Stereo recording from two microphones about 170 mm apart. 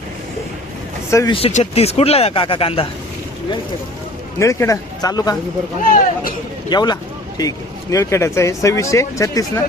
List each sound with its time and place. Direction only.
1.3 s speech: 35° left (ahead or behind)
4.4 s speech: 15° left (ahead or behind)
5.8 s speech: 55° left (ahead or behind)
6.7 s speech: 25° left (ahead or behind)